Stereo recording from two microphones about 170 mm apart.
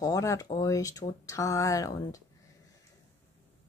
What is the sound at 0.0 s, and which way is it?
Speech, 20° left (ahead or behind).